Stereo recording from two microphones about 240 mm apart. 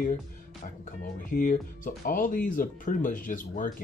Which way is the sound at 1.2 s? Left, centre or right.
Left.